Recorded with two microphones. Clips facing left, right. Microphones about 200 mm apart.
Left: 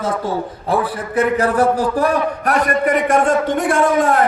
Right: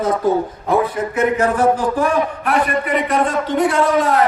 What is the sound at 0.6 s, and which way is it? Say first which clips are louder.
A man's voice: right 1 dB; 30° left (ahead or behind).